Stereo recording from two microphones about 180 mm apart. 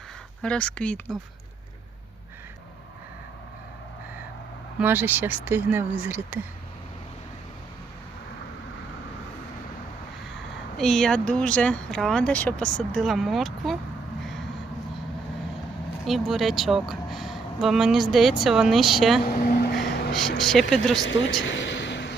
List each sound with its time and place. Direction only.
0.4 s speech: 5° left (ahead or behind)
4.8 s speech: 10° right (ahead or behind)
10.8 s speech: centre (ahead or behind)
16.0 s speech: centre (ahead or behind)
19.2 s vehicle: 55° left (ahead or behind)
20.4 s speech: centre (ahead or behind)
21.0 s speech: 90° left
21.4 s a sound: 90° left